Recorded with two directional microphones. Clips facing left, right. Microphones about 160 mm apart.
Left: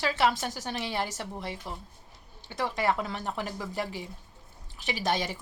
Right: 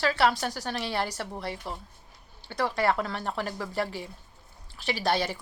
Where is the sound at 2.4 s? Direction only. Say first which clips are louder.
Right 2 dB; 15° left (ahead or behind).